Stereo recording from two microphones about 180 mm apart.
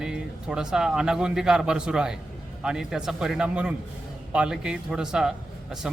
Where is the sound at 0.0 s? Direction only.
5° right (ahead or behind).